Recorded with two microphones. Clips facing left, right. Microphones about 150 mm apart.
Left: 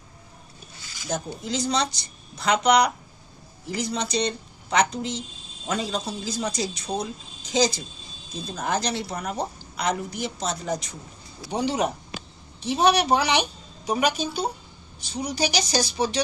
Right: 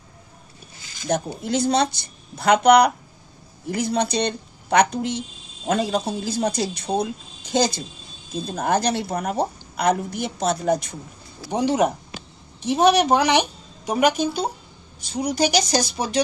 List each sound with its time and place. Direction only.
0.9 s speech: 60° right (ahead or behind)